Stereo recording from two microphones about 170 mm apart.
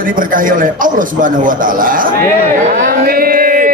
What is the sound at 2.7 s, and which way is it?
Music, 65° right (ahead or behind).